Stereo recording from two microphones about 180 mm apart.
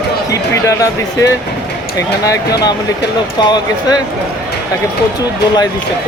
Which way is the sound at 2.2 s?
20° left (ahead or behind).